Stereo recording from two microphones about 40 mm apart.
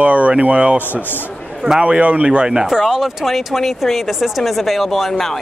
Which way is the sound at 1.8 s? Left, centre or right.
Right.